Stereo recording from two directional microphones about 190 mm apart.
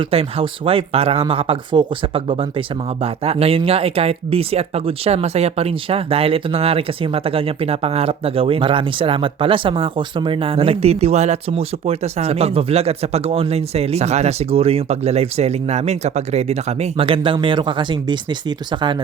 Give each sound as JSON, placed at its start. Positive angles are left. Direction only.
{"t": 0.0, "sound": "speech", "side_deg": -30}